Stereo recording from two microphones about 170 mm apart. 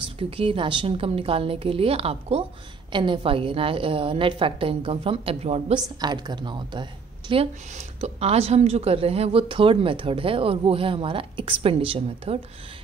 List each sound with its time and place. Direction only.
0.0 s speech: 30° right (ahead or behind)
5.9 s speech: 25° right (ahead or behind)